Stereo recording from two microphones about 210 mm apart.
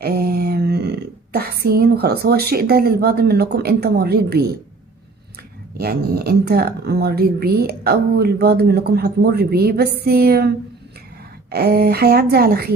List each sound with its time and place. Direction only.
0.0 s a sound: 50° right (ahead or behind)
1.6 s speech: 45° right (ahead or behind)
5.7 s speech: 45° right (ahead or behind)
11.5 s speech: 50° right (ahead or behind)